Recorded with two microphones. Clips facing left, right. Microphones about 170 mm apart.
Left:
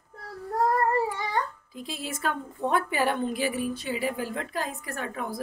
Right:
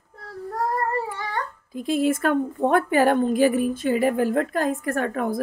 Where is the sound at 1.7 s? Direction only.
50° right (ahead or behind).